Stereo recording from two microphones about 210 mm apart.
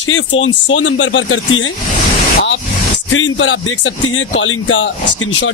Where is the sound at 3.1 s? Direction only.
65° left (ahead or behind).